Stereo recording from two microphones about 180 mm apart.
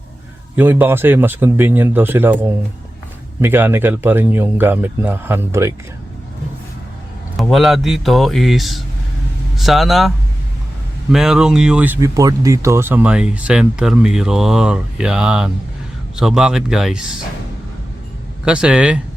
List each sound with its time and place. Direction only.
0.5 s a man's voice: 10° right (ahead or behind)
7.3 s speech: centre (ahead or behind)
11.1 s speech: 5° right (ahead or behind)
18.4 s speech: 5° right (ahead or behind)